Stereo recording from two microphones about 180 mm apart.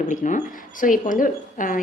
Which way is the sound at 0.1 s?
45° left (ahead or behind).